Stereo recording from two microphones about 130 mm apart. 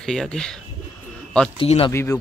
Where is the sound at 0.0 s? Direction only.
5° left (ahead or behind).